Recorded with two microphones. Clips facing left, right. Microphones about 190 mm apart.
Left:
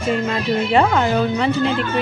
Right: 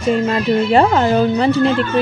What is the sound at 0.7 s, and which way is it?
Speech, 35° right (ahead or behind).